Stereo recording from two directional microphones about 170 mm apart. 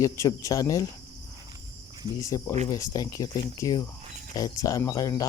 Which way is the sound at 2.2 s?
20° left (ahead or behind).